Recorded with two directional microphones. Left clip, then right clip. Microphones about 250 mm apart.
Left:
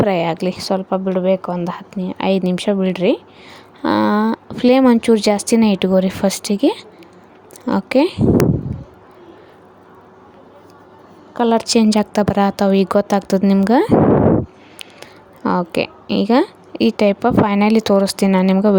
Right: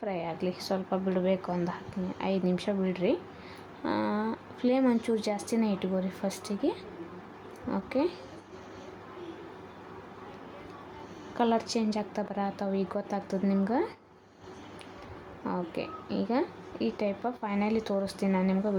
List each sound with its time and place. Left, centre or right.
0.0 s a woman's voice: left
11.3 s a woman's voice: left
15.4 s a woman's voice: left